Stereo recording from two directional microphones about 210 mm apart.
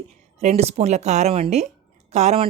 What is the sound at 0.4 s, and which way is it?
A woman's voice, 30° right (ahead or behind).